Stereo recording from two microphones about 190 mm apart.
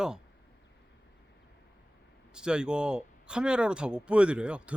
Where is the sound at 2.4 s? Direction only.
5° right (ahead or behind).